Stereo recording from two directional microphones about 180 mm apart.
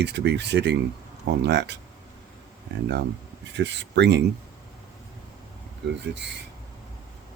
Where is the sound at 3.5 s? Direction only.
75° right (ahead or behind).